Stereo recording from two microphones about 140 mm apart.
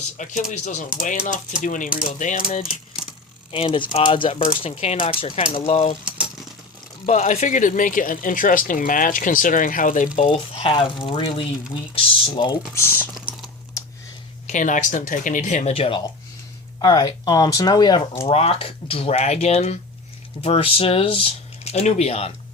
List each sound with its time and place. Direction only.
0.2 s speech: 60° left (ahead or behind)
0.9 s speech: 75° left (ahead or behind); by 2.6 s 60° left (ahead or behind)
3.5 s speech: 40° left (ahead or behind)
7.0 s speech: 55° left (ahead or behind); by 10.1 s 70° left (ahead or behind)
10.2 s speech: 50° left (ahead or behind)
12.7 s speech: 15° left (ahead or behind)
14.4 s speech: 65° left (ahead or behind)
15.7 s speech: 40° left (ahead or behind)
16.8 s speech: 30° left (ahead or behind)
18.3 s speech: 45° left (ahead or behind)